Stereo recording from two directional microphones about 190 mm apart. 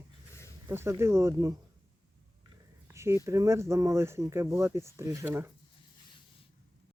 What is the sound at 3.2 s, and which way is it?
Speech, 15° right (ahead or behind).